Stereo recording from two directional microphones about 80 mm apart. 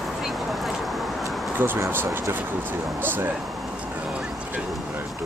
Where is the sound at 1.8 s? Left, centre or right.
Right.